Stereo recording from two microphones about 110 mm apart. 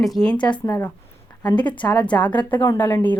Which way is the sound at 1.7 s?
10° left (ahead or behind).